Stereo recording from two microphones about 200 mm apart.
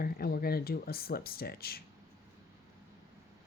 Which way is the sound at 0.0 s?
50° left (ahead or behind).